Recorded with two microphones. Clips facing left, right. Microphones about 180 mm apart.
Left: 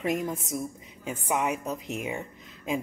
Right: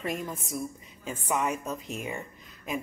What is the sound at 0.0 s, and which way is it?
A woman's voice, 20° left (ahead or behind).